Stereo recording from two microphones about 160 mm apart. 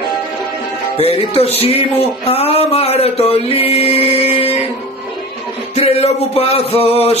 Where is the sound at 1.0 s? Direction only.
40° left (ahead or behind).